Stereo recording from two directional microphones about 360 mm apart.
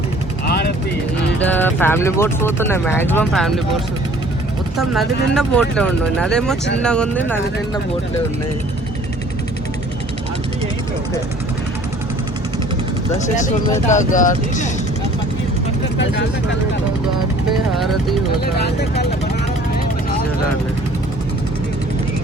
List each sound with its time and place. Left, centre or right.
0.4 s vehicle: left
1.4 s speech: centre
4.8 s speech: centre
13.1 s speech: centre